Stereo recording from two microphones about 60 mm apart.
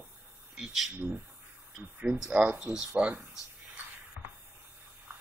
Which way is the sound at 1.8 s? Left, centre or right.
Centre.